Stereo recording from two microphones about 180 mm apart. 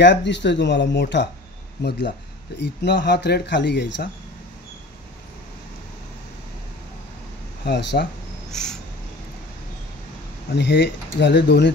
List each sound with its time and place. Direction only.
0.0 s speech: 80° left
7.6 s speech: 70° left (ahead or behind)
8.5 s a sound: centre (ahead or behind)
10.5 s speech: 70° left (ahead or behind)